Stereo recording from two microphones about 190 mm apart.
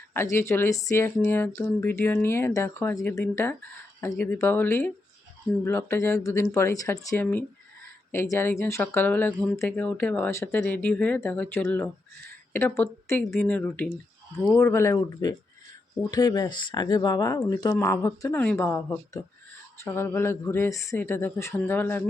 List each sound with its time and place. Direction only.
0.1 s speech: 15° left (ahead or behind)